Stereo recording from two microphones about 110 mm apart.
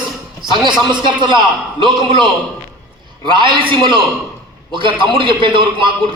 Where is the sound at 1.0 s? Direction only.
45° right (ahead or behind).